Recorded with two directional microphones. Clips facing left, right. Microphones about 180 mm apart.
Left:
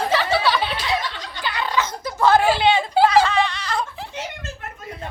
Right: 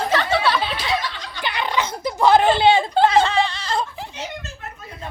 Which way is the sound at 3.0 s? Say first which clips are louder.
Left 1 dB; 25° right (ahead or behind).